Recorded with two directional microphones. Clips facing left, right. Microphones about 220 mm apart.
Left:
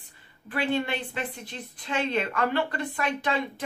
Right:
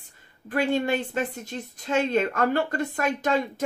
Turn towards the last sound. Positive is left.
turn(degrees=-45)  # may be behind; listen again after turning